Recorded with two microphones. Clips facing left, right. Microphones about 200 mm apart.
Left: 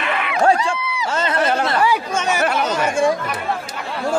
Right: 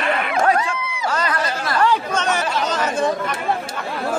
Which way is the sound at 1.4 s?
65° left (ahead or behind).